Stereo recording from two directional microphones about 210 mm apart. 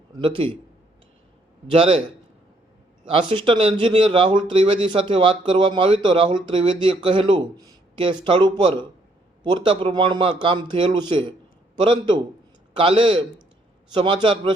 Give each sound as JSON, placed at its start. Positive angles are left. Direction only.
{"t": 0.2, "sound": "speech", "side_deg": -25}
{"t": 1.6, "sound": "speech", "side_deg": -25}
{"t": 3.1, "sound": "speech", "side_deg": -25}